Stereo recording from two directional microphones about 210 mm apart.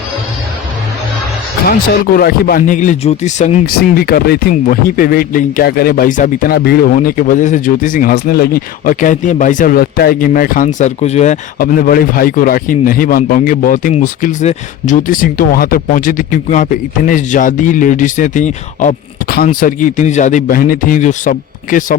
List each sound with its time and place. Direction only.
1.6 s speech: 45° left (ahead or behind)